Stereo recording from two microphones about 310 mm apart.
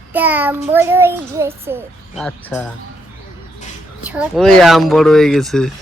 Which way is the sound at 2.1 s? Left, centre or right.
Centre.